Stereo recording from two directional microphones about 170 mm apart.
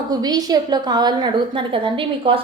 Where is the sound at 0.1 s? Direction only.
25° right (ahead or behind).